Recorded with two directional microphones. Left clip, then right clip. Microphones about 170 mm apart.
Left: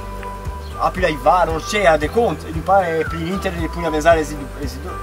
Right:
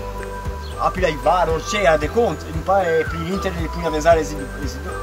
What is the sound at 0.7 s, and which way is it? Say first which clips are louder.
Speech: left 1 dB; 15° left (ahead or behind).